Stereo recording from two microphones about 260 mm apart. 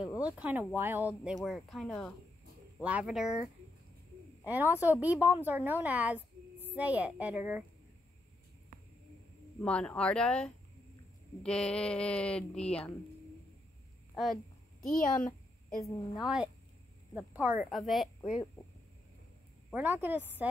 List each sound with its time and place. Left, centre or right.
0.4 s a woman's voice: centre
4.5 s a woman's voice: centre
9.6 s speech: centre
14.1 s a sound: centre
15.8 s a woman's voice: centre
17.1 s speech: centre
19.7 s a woman's voice: centre